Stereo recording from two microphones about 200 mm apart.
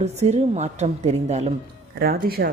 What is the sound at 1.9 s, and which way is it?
Speech, 50° right (ahead or behind).